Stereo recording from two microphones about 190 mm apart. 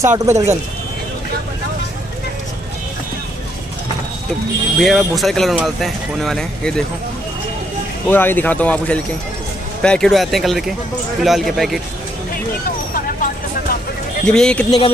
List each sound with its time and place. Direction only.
0.0 s speech: 15° right (ahead or behind)
4.7 s speech: centre (ahead or behind)
8.1 s speech: 10° left (ahead or behind)
12.9 s vehicle: 45° left (ahead or behind)
14.2 s speech: 5° left (ahead or behind)